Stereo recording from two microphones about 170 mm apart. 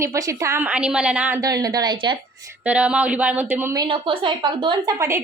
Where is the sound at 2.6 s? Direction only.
5° right (ahead or behind).